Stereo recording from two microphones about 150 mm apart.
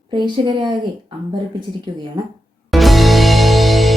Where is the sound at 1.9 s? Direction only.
30° right (ahead or behind).